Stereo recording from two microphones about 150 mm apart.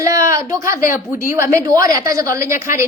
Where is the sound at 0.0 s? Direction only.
20° right (ahead or behind).